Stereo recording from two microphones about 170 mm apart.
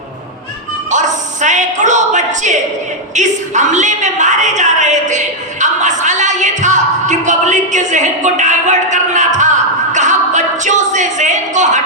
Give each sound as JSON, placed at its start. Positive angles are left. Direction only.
{"t": 0.9, "sound": "music", "side_deg": -45}
{"t": 3.2, "sound": "a woman's voice", "side_deg": -45}
{"t": 9.9, "sound": "a sound", "side_deg": -45}